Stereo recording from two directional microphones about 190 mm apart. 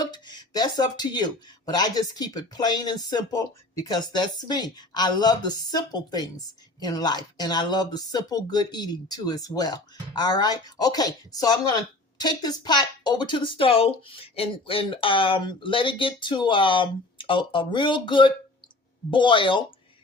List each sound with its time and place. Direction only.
0.0 s speech: 20° left (ahead or behind)